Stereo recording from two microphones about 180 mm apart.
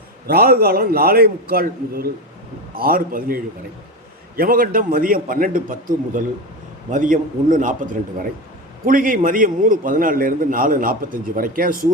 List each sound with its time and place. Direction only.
0.3 s a man's voice: 60° right (ahead or behind)